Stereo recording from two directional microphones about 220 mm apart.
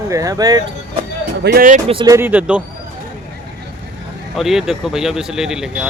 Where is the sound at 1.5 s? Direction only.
40° right (ahead or behind).